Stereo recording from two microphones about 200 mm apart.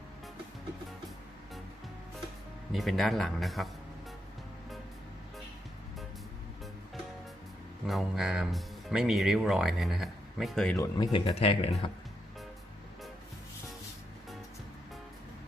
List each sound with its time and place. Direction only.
2.7 s speech: centre (ahead or behind)
7.9 s speech: centre (ahead or behind)
10.8 s speech: 20° left (ahead or behind)